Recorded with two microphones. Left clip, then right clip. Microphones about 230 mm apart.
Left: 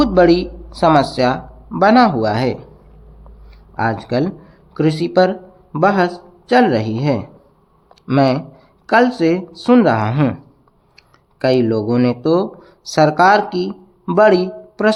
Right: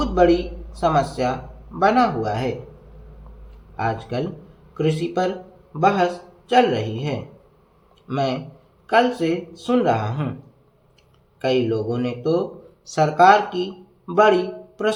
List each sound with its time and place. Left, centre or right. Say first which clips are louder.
0.0 s speech: left 5 dB; left
3.8 s speech: left 6 dB; left
11.3 s speech: left 6 dB; left